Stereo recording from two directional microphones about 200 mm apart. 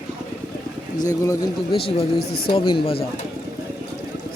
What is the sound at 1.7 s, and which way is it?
Speech, 30° left (ahead or behind).